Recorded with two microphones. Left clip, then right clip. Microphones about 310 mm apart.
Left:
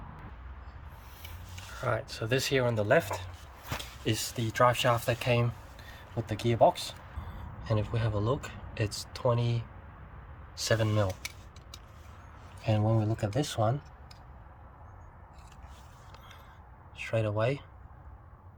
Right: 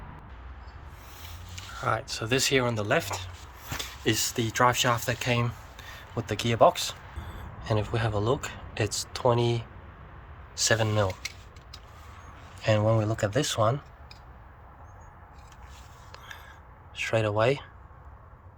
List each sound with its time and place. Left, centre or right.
1.8 s speech: centre
12.6 s speech: centre
16.9 s speech: centre